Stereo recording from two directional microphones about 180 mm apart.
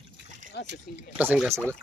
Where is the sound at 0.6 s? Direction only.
80° left.